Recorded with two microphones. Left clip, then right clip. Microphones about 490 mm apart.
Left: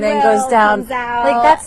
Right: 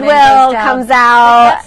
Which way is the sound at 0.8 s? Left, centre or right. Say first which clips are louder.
Right 10 dB; right.